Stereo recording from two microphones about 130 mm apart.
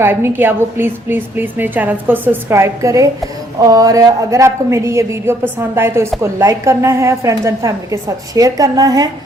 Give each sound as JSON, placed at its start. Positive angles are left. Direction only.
{"t": 0.0, "sound": "a woman's voice", "side_deg": -15}